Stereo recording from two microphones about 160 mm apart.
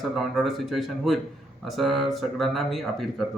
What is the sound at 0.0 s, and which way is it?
Speech, centre (ahead or behind).